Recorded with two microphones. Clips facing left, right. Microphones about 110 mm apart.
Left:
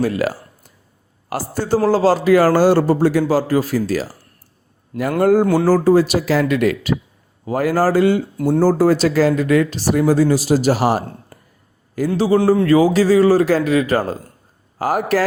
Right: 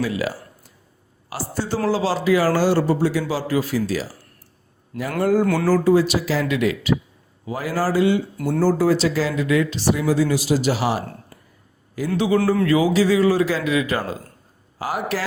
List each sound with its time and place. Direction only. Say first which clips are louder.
0.0 s speech: left 5 dB; 50° left (ahead or behind)
4.9 s a man's voice: left 5 dB; 25° left (ahead or behind); by 8.2 s 45° left (ahead or behind)
8.4 s speech: left 7 dB; 35° left (ahead or behind)